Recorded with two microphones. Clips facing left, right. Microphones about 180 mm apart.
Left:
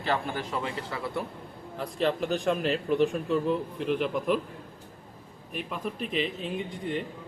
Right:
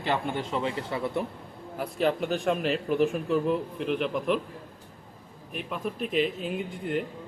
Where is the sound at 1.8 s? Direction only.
5° right (ahead or behind).